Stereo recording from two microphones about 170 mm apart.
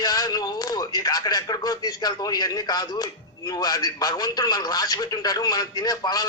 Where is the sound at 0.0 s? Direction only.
20° left (ahead or behind).